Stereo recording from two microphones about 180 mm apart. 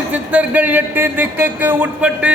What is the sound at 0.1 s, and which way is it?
A man's voice, 10° right (ahead or behind).